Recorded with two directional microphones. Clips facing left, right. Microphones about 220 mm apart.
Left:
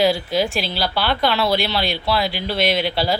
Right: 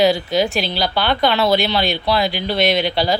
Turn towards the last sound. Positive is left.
turn(degrees=5)  # may be behind; listen again after turning